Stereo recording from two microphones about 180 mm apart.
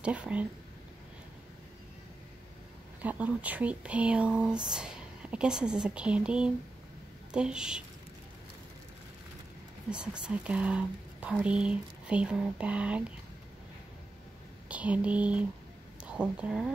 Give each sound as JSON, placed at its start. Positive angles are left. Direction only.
{"t": 0.0, "sound": "speech", "side_deg": -5}
{"t": 3.0, "sound": "a woman's voice", "side_deg": -10}
{"t": 9.9, "sound": "a woman's voice", "side_deg": -5}
{"t": 14.7, "sound": "a woman's voice", "side_deg": -5}